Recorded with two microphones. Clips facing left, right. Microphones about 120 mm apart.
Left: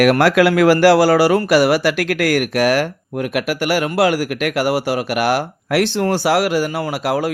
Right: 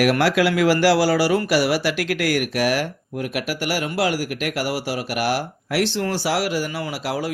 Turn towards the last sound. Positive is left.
turn(degrees=55)  # may be behind; listen again after turning